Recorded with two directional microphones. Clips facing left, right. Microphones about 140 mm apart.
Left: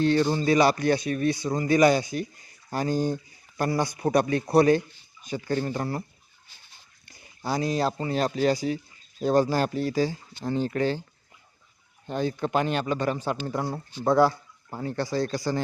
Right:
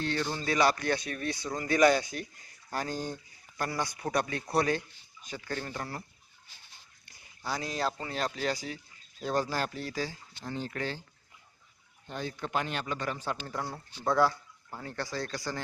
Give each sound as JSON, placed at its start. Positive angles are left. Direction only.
{"t": 0.0, "sound": "speech", "side_deg": 20}
{"t": 3.6, "sound": "speech", "side_deg": 25}
{"t": 7.4, "sound": "speech", "side_deg": 30}
{"t": 12.1, "sound": "speech", "side_deg": 30}